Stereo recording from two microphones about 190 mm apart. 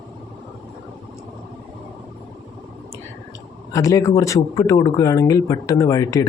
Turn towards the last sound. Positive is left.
turn(degrees=15)  # may be behind; listen again after turning